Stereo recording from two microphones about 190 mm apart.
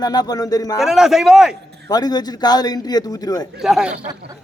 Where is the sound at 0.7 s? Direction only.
Centre (ahead or behind).